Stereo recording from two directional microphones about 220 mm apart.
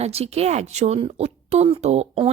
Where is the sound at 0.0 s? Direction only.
30° right (ahead or behind).